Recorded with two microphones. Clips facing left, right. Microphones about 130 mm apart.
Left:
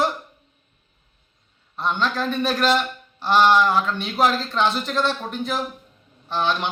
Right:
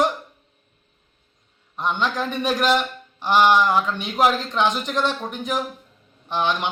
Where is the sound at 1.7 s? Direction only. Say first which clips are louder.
Even; 15° right (ahead or behind).